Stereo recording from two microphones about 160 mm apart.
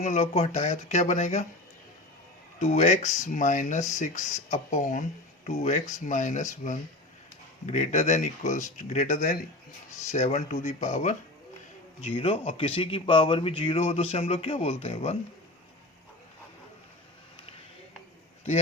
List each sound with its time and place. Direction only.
0.0 s speech: 50° left (ahead or behind)
2.6 s speech: 45° left (ahead or behind)
7.7 s speech: 50° left (ahead or behind)
10.1 s speech: 45° left (ahead or behind)
12.1 s speech: 35° left (ahead or behind)